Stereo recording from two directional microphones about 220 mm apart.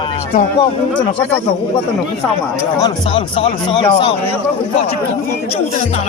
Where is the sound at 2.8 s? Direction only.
20° left (ahead or behind).